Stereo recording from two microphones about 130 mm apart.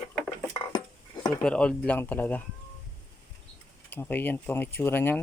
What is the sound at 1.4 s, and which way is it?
Speech, 5° left (ahead or behind).